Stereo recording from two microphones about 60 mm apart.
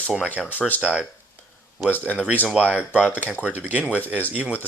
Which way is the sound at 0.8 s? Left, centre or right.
Centre.